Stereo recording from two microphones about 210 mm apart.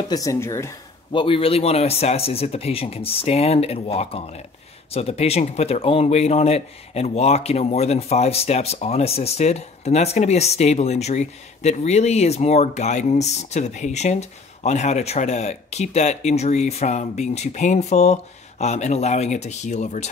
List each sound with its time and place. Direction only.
0.1 s speech: 15° left (ahead or behind)
1.2 s speech: 25° left (ahead or behind)